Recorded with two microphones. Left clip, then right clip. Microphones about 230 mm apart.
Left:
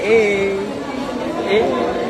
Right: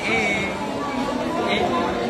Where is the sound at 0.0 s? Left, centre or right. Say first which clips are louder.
Left 7 dB; centre.